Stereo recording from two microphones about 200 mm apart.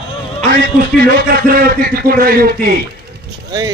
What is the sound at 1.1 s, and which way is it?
A man's voice, 45° right (ahead or behind).